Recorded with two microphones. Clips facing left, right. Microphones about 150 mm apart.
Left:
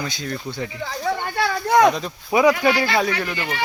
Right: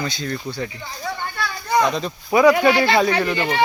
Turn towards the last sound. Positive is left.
turn(degrees=-25)  # may be behind; listen again after turning